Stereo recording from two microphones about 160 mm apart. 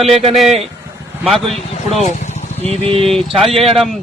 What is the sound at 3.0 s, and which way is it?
Speech, centre (ahead or behind).